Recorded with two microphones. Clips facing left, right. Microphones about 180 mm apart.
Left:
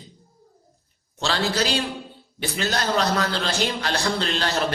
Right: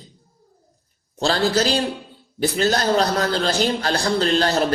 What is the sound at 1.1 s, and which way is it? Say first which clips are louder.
A man's voice: right 5 dB; 35° right (ahead or behind).